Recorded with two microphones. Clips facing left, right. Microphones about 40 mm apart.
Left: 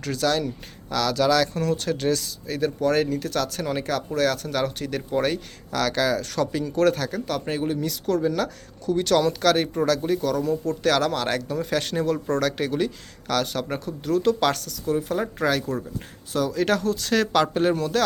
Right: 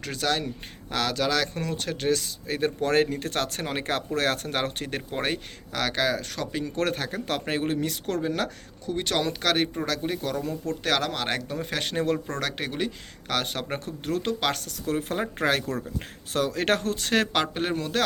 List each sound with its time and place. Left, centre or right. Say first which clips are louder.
0.0 s speech: left 4 dB; right
1.2 s speech: left 8 dB; centre
5.7 s speech: left 3 dB; centre
7.4 s speech: left 1 dB; right
14.3 s a man's voice: left 5 dB; centre
14.8 s speech: left 3 dB; right
17.4 s a man's voice: left 6 dB; centre